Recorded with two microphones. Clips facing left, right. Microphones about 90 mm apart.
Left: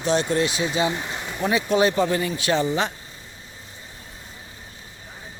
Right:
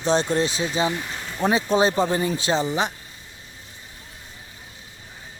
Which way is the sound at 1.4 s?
30° right (ahead or behind).